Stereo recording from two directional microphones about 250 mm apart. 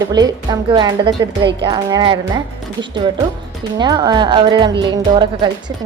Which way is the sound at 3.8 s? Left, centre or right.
Centre.